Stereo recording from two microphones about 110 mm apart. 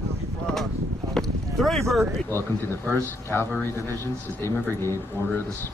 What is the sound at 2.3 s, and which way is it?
Speech, 20° left (ahead or behind).